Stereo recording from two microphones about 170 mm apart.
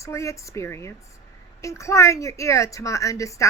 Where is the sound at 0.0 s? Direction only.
15° left (ahead or behind).